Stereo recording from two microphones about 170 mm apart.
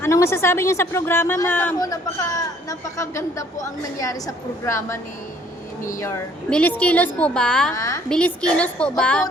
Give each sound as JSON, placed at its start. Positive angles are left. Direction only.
{"t": 0.0, "sound": "a woman's voice", "side_deg": 15}
{"t": 6.0, "sound": "a woman's voice", "side_deg": 15}
{"t": 7.7, "sound": "a woman's voice", "side_deg": 20}
{"t": 8.1, "sound": "a woman's voice", "side_deg": 5}